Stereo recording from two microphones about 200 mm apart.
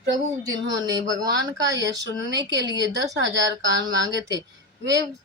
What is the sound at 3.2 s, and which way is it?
Speech, 65° right (ahead or behind).